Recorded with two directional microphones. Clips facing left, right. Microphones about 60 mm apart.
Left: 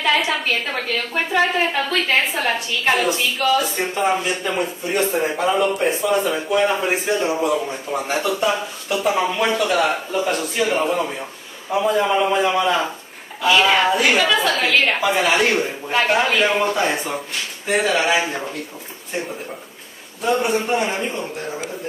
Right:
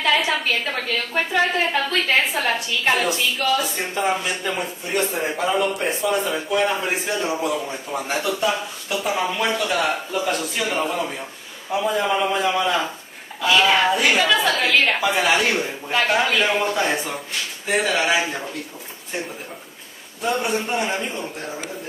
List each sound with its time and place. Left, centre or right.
0.3 s a woman's voice: centre
11.8 s a woman's voice: centre
17.6 s a woman's voice: centre
20.2 s a woman's voice: centre